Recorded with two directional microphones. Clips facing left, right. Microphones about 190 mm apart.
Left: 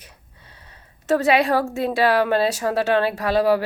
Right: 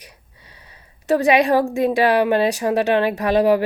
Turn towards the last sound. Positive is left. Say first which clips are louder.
# right 3 dB
turn(degrees=-20)  # may be behind; listen again after turning